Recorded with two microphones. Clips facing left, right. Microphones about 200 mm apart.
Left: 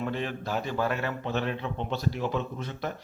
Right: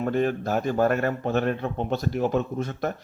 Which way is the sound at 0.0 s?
45° right (ahead or behind).